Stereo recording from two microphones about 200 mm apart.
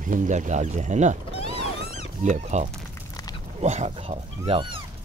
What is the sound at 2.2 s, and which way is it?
Speech, 35° right (ahead or behind).